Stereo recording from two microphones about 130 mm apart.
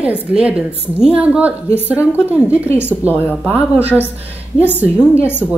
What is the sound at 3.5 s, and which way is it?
Speech, 10° right (ahead or behind).